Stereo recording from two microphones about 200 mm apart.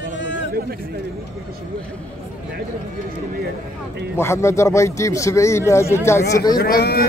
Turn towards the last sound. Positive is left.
turn(degrees=50)  # may be behind; listen again after turning